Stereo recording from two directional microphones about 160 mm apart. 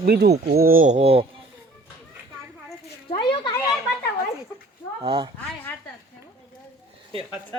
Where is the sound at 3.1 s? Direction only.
35° left (ahead or behind).